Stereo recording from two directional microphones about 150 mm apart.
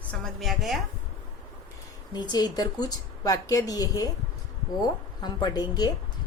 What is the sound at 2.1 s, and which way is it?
A woman's voice, 30° left (ahead or behind).